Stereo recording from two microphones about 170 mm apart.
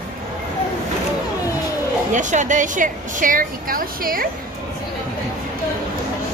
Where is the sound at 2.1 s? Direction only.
45° right (ahead or behind).